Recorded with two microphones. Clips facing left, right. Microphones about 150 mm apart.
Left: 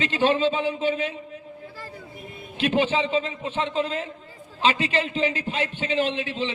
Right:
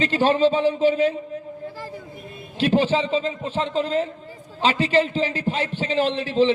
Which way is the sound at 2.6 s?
35° right (ahead or behind).